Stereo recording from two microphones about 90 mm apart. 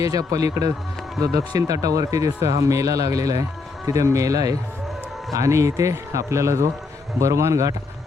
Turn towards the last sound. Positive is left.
turn(degrees=-35)  # may be behind; listen again after turning